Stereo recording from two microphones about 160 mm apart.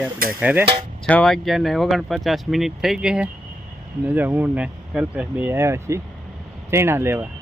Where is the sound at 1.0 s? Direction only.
5° left (ahead or behind); by 7.3 s 15° right (ahead or behind).